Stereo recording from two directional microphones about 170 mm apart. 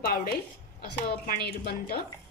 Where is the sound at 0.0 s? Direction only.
60° left (ahead or behind).